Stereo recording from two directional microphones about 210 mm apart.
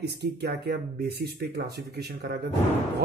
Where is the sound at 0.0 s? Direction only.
50° right (ahead or behind).